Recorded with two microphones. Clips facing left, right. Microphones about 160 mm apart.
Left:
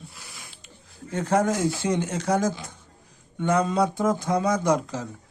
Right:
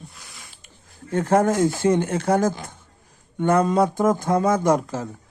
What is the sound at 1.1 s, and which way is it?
Speech, 50° right (ahead or behind).